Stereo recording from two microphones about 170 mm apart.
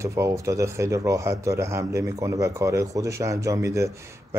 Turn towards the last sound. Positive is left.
turn(degrees=-20)  # may be behind; listen again after turning